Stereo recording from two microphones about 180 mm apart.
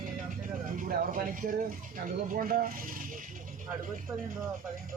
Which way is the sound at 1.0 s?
50° right (ahead or behind).